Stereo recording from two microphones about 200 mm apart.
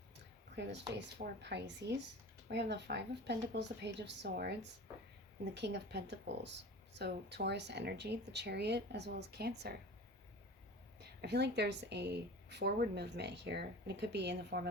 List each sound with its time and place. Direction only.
0.5 s a woman's voice: 60° right (ahead or behind)
11.0 s a woman's voice: 55° right (ahead or behind)